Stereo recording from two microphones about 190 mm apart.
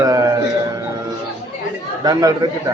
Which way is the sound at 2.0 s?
20° right (ahead or behind).